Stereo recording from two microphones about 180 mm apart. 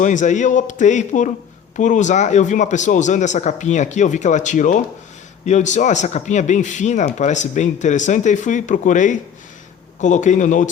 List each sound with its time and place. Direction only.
0.0 s a man's voice: 45° left (ahead or behind)